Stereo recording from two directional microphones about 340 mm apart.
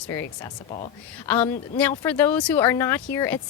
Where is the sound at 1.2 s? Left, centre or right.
Centre.